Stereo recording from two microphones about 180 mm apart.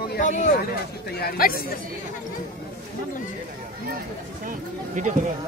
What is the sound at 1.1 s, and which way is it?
Speech, 60° left (ahead or behind).